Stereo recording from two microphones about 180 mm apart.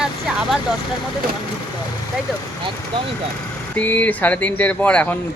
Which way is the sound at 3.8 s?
10° left (ahead or behind).